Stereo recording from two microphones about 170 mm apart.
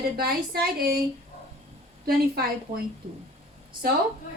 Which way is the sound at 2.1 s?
65° right (ahead or behind).